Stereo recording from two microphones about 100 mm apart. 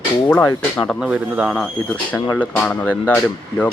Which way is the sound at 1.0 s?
15° right (ahead or behind).